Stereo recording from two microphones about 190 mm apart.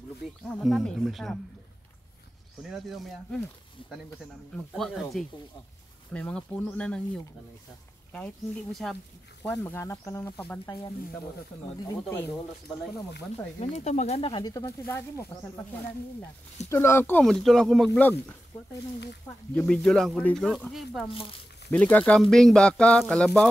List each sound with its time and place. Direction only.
0.5 s speech: centre (ahead or behind)
2.7 s speech: centre (ahead or behind)
4.7 s speech: centre (ahead or behind)
8.1 s speech: 5° left (ahead or behind)
11.9 s speech: 15° left (ahead or behind)
13.6 s speech: 35° left (ahead or behind); by 15.6 s 15° left (ahead or behind)
16.6 s speech: 15° left (ahead or behind)
19.5 s speech: 5° left (ahead or behind)
21.1 s speech: 30° left (ahead or behind)
21.6 s speech: 5° left (ahead or behind)